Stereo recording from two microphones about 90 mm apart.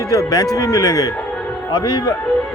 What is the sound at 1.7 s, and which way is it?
Speech, 60° left (ahead or behind).